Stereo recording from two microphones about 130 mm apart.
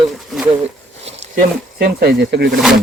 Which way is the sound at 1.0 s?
55° right (ahead or behind).